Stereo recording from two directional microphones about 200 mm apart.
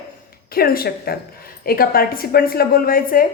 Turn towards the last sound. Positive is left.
turn(degrees=45)  # may be behind; listen again after turning